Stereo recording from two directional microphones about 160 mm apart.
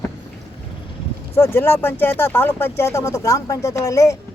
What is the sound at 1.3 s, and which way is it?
Speech, 15° left (ahead or behind).